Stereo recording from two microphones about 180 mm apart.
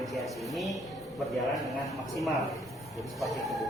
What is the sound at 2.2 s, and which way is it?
A man's voice, centre (ahead or behind).